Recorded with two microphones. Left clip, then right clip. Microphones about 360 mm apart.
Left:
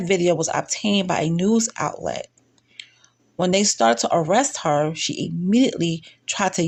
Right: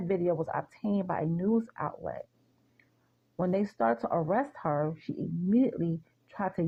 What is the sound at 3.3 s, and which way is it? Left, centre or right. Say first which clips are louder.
Speech: left 11 dB; right.